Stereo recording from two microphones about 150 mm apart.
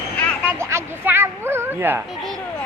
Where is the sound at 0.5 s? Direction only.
20° right (ahead or behind).